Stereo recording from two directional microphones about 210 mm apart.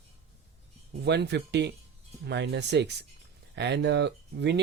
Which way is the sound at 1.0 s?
55° right (ahead or behind).